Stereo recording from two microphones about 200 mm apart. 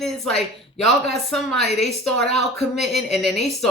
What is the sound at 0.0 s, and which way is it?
A woman's voice, centre (ahead or behind).